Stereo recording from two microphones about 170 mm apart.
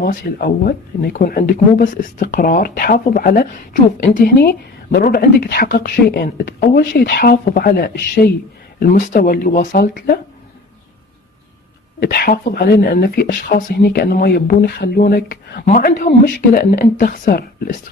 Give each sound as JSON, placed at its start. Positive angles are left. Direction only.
{"t": 0.0, "sound": "speech", "side_deg": 60}
{"t": 4.4, "sound": "speech", "side_deg": 70}
{"t": 8.7, "sound": "speech", "side_deg": 60}
{"t": 12.0, "sound": "speech", "side_deg": 65}
{"t": 15.7, "sound": "speech", "side_deg": 55}